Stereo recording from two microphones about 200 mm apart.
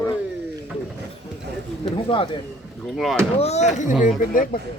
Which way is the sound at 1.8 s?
25° left (ahead or behind).